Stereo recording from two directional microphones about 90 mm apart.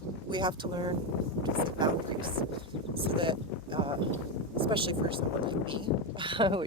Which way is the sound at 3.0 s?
75° right (ahead or behind).